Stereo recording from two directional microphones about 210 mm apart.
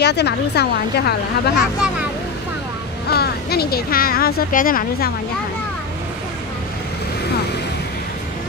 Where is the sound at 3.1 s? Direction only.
50° left (ahead or behind).